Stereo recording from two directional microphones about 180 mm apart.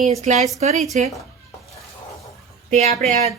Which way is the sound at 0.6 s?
40° right (ahead or behind).